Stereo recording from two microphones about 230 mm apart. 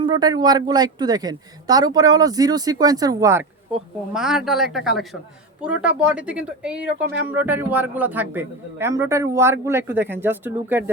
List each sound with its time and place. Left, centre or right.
0.0 s speech: centre
4.1 s speech: centre